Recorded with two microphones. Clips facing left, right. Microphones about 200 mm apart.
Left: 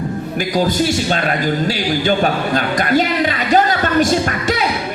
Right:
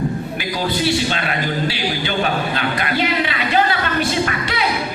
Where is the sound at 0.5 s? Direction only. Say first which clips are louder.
Left 3 dB; 45° left (ahead or behind).